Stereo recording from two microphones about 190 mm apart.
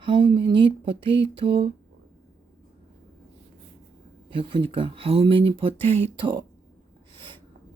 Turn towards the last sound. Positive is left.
turn(degrees=-25)  # may be behind; listen again after turning